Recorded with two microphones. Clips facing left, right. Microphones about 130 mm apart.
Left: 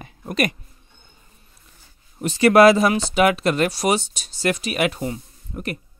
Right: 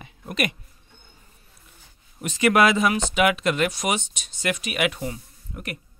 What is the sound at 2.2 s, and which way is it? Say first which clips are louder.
Speech: left 6 dB; 35° left (ahead or behind).